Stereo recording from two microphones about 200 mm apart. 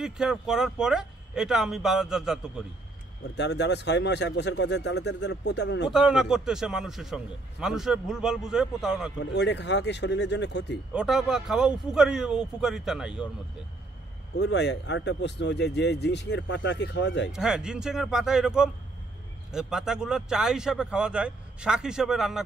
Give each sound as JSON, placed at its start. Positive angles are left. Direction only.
{"t": 0.0, "sound": "a man's voice", "side_deg": -5}
{"t": 3.3, "sound": "speech", "side_deg": 60}
{"t": 5.9, "sound": "a man's voice", "side_deg": 0}
{"t": 9.2, "sound": "speech", "side_deg": 60}
{"t": 10.9, "sound": "a man's voice", "side_deg": -5}
{"t": 14.4, "sound": "speech", "side_deg": 60}
{"t": 17.3, "sound": "a man's voice", "side_deg": -5}